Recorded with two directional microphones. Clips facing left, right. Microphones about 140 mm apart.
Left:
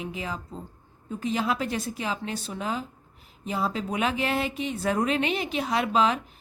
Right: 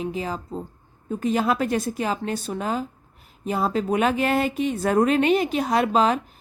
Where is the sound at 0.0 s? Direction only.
35° right (ahead or behind).